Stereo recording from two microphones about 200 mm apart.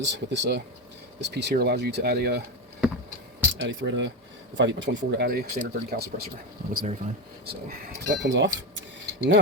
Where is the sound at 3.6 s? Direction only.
65° right (ahead or behind).